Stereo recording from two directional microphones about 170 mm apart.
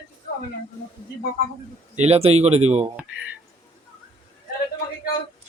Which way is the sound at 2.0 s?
35° right (ahead or behind).